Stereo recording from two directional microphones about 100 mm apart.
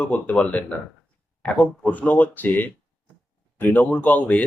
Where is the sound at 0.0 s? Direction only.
15° left (ahead or behind).